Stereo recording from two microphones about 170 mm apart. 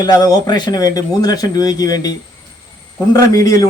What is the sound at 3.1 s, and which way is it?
Speech, 20° left (ahead or behind).